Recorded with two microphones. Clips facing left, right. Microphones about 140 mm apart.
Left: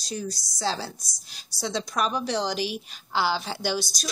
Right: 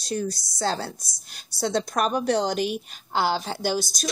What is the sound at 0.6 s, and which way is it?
A woman's voice, 55° right (ahead or behind).